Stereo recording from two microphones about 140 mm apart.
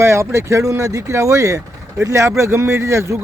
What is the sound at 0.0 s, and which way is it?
Speech, 20° right (ahead or behind).